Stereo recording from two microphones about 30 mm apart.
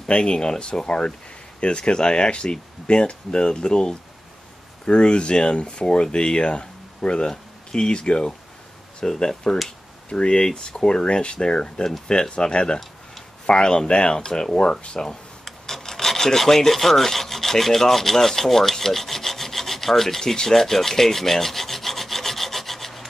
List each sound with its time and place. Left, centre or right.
0.2 s speech: left
9.0 s speech: left
9.5 s rub: centre
10.0 s speech: left
14.2 s speech: left
15.4 s rub: centre